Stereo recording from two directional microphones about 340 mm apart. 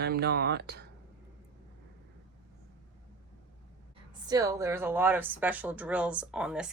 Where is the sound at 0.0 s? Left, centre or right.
Right.